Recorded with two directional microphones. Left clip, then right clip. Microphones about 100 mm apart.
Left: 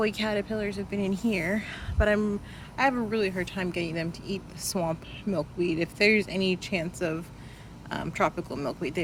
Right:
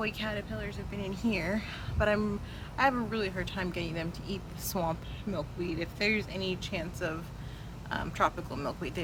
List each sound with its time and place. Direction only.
0.0 s speech: 45° left (ahead or behind)
1.0 s speech: 30° left (ahead or behind)
5.6 s speech: 40° left (ahead or behind)